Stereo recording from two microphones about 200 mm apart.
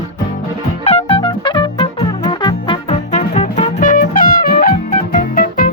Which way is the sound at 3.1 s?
35° left (ahead or behind).